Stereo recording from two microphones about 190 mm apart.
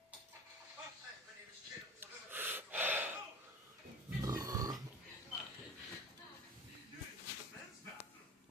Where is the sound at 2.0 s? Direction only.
10° right (ahead or behind).